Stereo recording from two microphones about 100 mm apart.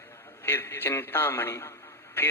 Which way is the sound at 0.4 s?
25° left (ahead or behind).